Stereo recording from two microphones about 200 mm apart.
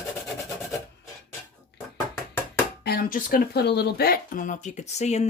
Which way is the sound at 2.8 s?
50° left (ahead or behind).